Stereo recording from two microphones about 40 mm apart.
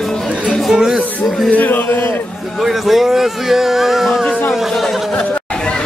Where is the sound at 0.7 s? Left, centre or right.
Centre.